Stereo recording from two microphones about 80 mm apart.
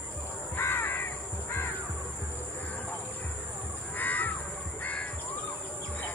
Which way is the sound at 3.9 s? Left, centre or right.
Left.